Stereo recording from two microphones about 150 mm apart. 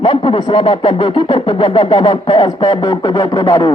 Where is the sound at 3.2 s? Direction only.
25° left (ahead or behind).